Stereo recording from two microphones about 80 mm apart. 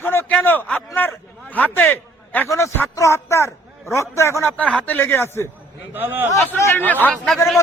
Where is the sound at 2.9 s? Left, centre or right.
Left.